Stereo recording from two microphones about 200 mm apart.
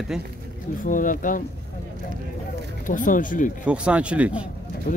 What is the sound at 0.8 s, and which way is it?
Speech, 40° left (ahead or behind).